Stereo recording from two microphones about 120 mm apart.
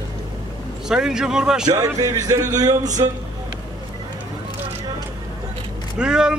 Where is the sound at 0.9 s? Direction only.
5° right (ahead or behind).